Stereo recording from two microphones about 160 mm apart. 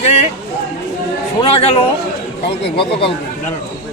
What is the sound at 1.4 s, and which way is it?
Speech, 35° left (ahead or behind).